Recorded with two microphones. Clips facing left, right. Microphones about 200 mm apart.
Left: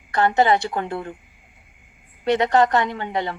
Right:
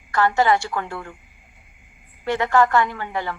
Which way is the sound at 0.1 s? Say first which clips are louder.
Left 1 dB; 20° left (ahead or behind).